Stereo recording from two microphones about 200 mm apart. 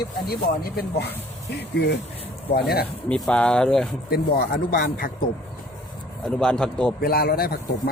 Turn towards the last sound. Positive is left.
turn(degrees=50)  # may be behind; listen again after turning